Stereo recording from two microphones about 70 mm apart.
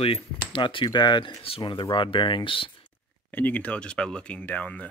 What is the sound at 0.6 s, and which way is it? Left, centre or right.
Speech, left.